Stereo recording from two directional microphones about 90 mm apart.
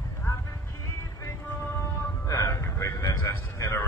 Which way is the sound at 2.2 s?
35° left (ahead or behind).